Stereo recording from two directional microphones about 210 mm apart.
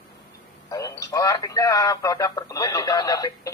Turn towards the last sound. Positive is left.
turn(degrees=15)  # may be behind; listen again after turning